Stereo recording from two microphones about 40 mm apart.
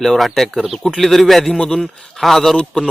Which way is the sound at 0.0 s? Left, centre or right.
Centre.